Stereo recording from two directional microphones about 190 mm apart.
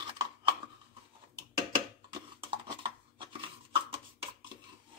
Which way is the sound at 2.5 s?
25° right (ahead or behind).